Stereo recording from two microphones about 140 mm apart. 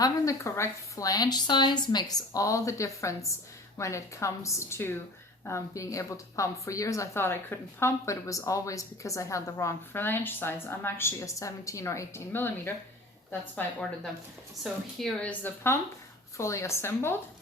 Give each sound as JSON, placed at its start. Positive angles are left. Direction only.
{"t": 0.0, "sound": "speech", "side_deg": 20}
{"t": 14.6, "sound": "speech", "side_deg": 0}